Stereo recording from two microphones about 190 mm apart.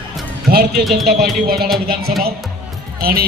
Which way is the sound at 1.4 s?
55° right (ahead or behind).